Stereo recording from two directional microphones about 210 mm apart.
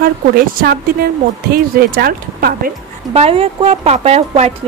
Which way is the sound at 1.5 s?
45° right (ahead or behind).